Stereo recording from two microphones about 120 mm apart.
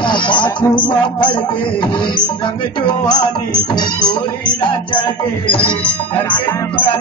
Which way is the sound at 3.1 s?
40° left (ahead or behind).